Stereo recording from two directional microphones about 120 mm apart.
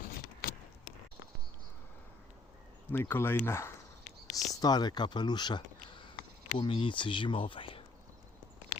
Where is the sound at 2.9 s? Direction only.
15° left (ahead or behind).